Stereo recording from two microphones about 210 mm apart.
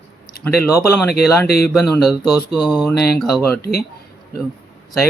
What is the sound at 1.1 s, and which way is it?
Speech, 50° left (ahead or behind).